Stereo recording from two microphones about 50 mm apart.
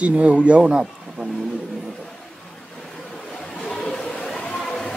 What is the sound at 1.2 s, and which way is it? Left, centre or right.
Vehicle, centre.